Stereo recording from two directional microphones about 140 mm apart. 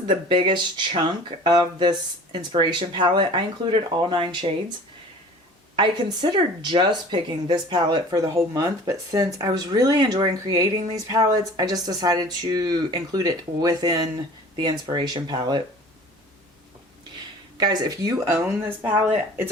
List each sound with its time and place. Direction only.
0.1 s speech: 35° right (ahead or behind)
5.7 s a woman's voice: 35° right (ahead or behind)
17.6 s speech: 30° right (ahead or behind)